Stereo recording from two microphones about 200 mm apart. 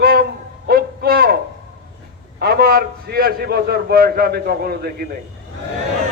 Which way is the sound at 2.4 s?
50° right (ahead or behind).